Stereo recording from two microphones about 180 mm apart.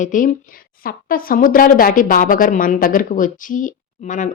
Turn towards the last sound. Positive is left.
turn(degrees=45)  # may be behind; listen again after turning